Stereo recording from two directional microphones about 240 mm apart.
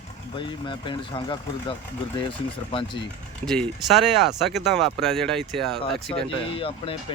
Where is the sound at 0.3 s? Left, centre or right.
Centre.